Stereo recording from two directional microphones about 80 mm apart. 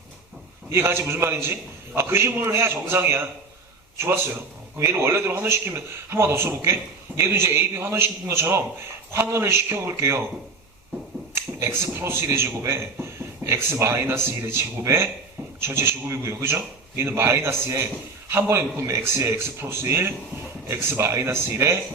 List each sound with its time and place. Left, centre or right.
0.7 s a man's voice: right
11.3 s a man's voice: right